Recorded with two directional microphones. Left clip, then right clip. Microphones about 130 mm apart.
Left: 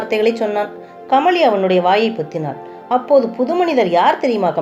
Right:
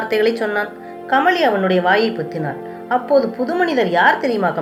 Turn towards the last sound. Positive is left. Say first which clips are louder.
# left 1 dB
turn(degrees=50)  # may be behind; listen again after turning